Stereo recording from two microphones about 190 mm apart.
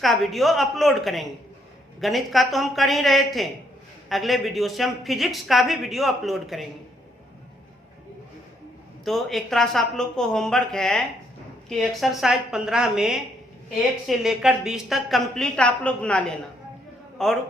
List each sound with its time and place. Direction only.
0.0 s a woman's voice: centre (ahead or behind)
9.0 s a woman's voice: centre (ahead or behind)